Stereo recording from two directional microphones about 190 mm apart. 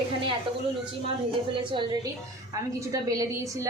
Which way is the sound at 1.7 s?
25° right (ahead or behind).